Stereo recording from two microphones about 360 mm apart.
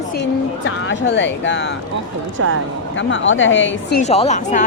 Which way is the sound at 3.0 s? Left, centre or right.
Left.